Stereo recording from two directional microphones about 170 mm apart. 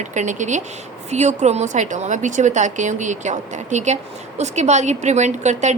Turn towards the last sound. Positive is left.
turn(degrees=-45)  # may be behind; listen again after turning